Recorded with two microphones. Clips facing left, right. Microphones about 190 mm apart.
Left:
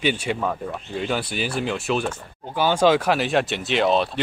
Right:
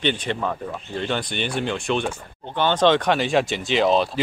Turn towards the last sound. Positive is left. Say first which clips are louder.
# right 1 dB
turn(degrees=0)  # may be behind; listen again after turning